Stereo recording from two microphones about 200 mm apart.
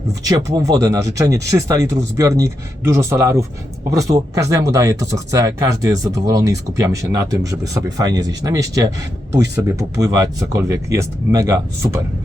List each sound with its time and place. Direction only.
0.3 s speech: 20° right (ahead or behind)